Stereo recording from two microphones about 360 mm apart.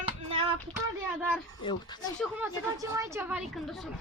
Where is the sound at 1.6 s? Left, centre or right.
Centre.